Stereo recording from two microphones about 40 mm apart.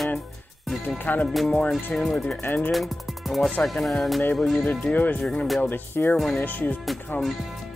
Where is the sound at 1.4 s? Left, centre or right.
Left.